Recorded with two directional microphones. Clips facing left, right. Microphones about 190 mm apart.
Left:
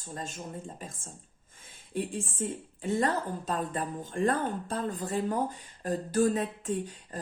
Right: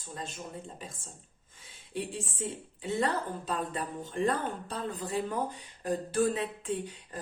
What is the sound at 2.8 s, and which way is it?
Speech, 45° left (ahead or behind).